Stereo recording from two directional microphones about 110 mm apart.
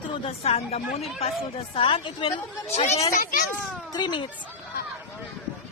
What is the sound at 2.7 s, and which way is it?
Speech, 70° left (ahead or behind).